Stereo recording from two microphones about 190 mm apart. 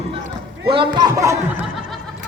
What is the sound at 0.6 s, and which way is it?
Speech, 25° right (ahead or behind).